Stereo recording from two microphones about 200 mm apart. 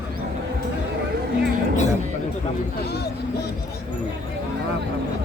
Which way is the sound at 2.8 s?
55° left (ahead or behind).